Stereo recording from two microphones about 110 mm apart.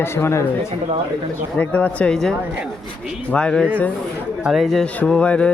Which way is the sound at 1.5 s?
15° left (ahead or behind).